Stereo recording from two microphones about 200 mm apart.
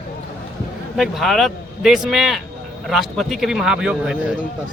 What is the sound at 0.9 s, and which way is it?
Speech, centre (ahead or behind).